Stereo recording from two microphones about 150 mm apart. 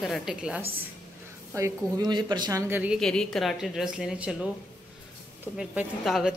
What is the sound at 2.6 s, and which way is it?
Speech, 10° right (ahead or behind).